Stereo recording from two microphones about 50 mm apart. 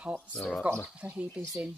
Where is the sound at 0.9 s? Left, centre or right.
Right.